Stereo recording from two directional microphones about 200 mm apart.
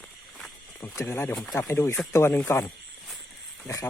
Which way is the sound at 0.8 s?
10° left (ahead or behind).